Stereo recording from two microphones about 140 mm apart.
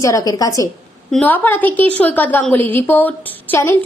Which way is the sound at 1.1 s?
10° left (ahead or behind).